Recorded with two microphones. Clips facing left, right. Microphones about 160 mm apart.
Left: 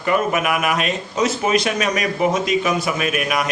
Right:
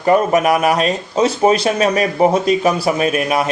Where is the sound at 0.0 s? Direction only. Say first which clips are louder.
Right 6 dB; 35° right (ahead or behind).